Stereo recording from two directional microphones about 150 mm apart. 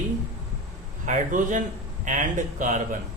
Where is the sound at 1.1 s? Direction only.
60° right (ahead or behind).